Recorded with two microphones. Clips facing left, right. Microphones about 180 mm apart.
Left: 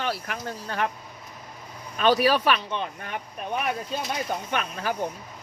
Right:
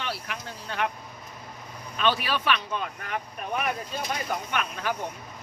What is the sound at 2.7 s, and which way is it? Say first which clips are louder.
Speech: left 1 dB; 25° left (ahead or behind).